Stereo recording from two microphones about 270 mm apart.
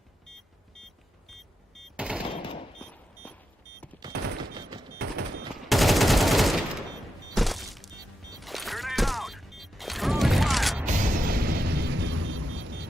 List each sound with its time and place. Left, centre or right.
1.8 s machine gun: centre
2.2 s machine gun: centre
2.8 s a sound: centre
4.1 s fusillade: right
4.5 s fusillade: centre
4.9 s fusillade: right
5.5 s gunshot: centre
7.3 s a sound: centre
8.4 s music: centre
10.8 s music: right